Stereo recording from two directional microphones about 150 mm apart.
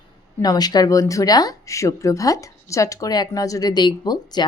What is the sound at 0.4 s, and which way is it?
Speech, 25° left (ahead or behind).